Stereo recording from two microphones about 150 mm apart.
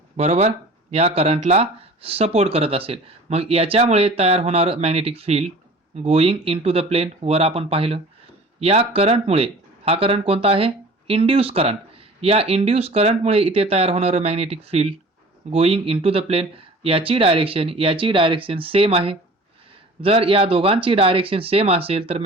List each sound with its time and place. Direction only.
0.2 s speech: 45° right (ahead or behind)